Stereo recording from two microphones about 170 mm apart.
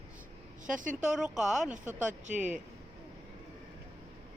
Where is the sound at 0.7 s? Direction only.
50° right (ahead or behind).